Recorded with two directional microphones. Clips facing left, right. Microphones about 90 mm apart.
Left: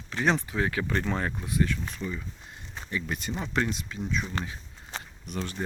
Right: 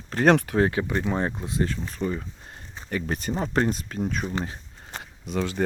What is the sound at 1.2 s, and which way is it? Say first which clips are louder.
Speech: right 1 dB; 25° right (ahead or behind).